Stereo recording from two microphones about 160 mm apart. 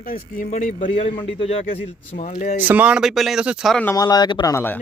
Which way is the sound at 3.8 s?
20° left (ahead or behind).